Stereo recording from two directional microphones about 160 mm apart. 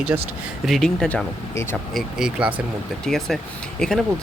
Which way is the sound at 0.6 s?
Centre (ahead or behind).